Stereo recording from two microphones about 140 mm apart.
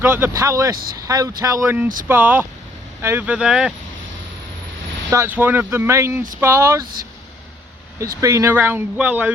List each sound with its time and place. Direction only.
0.0 s speech: 15° right (ahead or behind)
5.1 s speech: 15° right (ahead or behind)
8.2 s speech: 20° right (ahead or behind)